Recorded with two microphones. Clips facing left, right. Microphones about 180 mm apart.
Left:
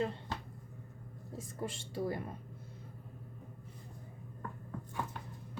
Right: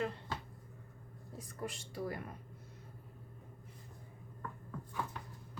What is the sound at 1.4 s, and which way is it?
Speech, 25° left (ahead or behind).